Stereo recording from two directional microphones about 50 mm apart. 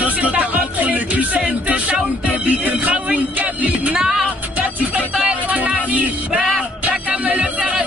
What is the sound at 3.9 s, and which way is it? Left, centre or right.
Music, centre.